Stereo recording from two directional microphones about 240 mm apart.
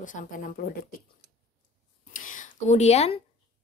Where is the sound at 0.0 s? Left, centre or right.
Left.